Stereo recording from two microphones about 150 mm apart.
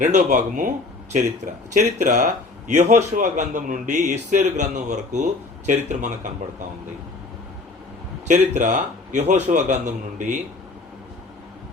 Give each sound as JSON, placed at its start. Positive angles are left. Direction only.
{"t": 0.0, "sound": "speech", "side_deg": -55}
{"t": 1.7, "sound": "a man's voice", "side_deg": -55}
{"t": 8.3, "sound": "a man's voice", "side_deg": -55}